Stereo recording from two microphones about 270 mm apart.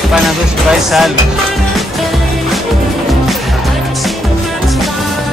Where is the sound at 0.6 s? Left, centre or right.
Centre.